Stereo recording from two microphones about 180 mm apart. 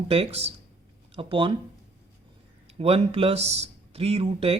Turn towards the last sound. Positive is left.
turn(degrees=-30)  # may be behind; listen again after turning